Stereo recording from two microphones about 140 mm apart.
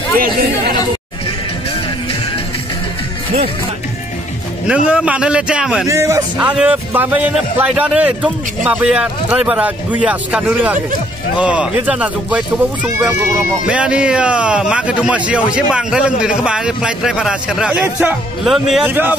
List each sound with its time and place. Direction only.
4.6 s a man's voice: 10° right (ahead or behind)
5.9 s a man's voice: 20° right (ahead or behind)
6.3 s a man's voice: 10° right (ahead or behind)
18.9 s a man's voice: 15° right (ahead or behind)